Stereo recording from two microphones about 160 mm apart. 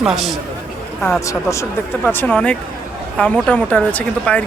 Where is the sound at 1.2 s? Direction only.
20° left (ahead or behind).